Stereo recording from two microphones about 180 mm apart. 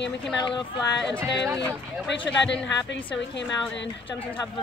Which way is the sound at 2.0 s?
80° left.